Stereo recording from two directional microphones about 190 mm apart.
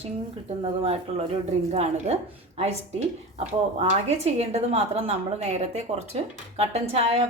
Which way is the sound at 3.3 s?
35° right (ahead or behind).